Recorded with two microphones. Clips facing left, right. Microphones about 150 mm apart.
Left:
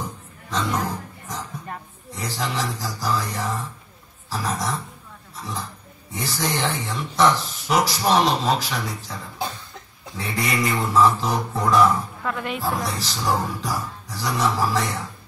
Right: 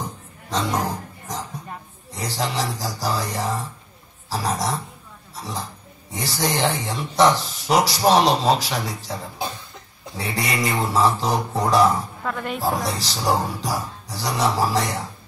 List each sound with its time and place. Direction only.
0.5 s speech: 35° right (ahead or behind)
2.1 s speech: 35° right (ahead or behind)
5.3 s a sound: 35° right (ahead or behind)
6.1 s speech: 35° right (ahead or behind)